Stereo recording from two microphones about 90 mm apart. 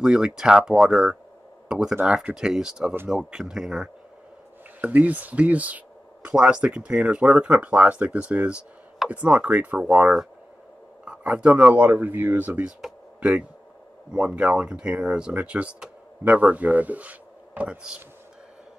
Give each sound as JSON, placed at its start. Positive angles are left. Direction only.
{"t": 0.0, "sound": "speech", "side_deg": -5}
{"t": 4.8, "sound": "speech", "side_deg": -15}
{"t": 14.1, "sound": "speech", "side_deg": -10}